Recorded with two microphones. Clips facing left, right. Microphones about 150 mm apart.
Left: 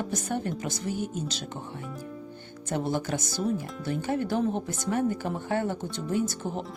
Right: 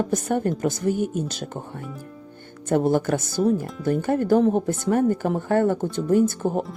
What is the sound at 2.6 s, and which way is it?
Speech, 50° right (ahead or behind).